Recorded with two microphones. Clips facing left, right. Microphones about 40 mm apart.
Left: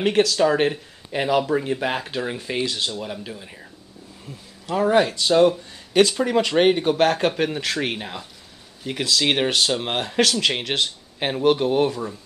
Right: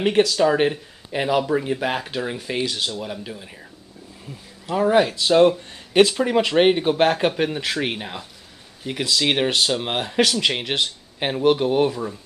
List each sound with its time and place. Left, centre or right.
0.0 s speech: centre
4.6 s speech: centre
5.1 s speech: centre
5.7 s a sound: right
6.1 s speech: centre